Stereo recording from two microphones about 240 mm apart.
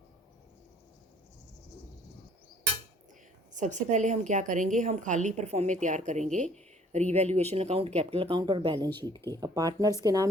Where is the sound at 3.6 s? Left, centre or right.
Right.